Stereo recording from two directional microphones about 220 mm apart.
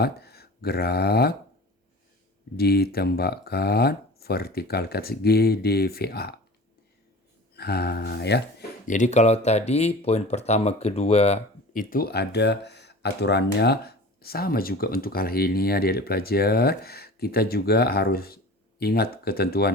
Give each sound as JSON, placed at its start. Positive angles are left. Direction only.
{"t": 0.0, "sound": "speech", "side_deg": 45}
{"t": 2.6, "sound": "speech", "side_deg": 45}
{"t": 7.5, "sound": "speech", "side_deg": 45}
{"t": 8.9, "sound": "speech", "side_deg": 35}